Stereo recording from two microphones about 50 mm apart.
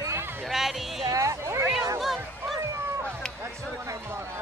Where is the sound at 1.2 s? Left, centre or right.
Right.